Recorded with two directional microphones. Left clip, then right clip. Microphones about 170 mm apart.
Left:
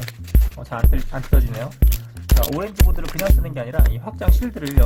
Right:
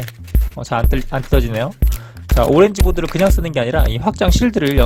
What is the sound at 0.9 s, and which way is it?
Speech, 50° right (ahead or behind).